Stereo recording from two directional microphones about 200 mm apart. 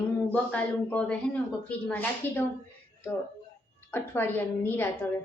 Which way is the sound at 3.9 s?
10° left (ahead or behind).